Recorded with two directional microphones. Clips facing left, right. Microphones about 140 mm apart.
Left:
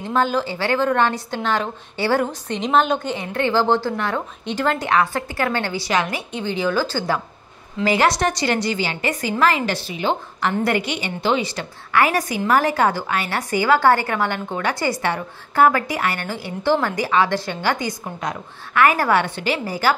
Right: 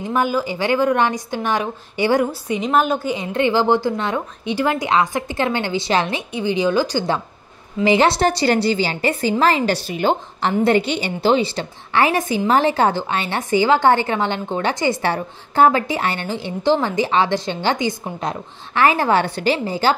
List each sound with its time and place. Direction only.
0.0 s a woman's voice: 10° right (ahead or behind)
3.2 s a woman's voice: 15° right (ahead or behind)
6.3 s a woman's voice: 15° right (ahead or behind); by 9.8 s 30° right (ahead or behind)
9.8 s a woman's voice: 45° right (ahead or behind)
10.6 s a woman's voice: 25° right (ahead or behind)